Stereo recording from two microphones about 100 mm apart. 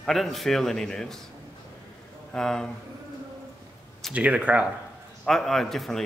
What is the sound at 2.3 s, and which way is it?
Speech, 5° left (ahead or behind).